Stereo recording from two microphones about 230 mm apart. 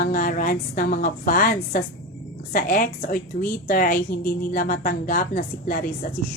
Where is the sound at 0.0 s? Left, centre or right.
Left.